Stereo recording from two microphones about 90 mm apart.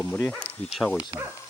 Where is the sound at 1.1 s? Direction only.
35° right (ahead or behind).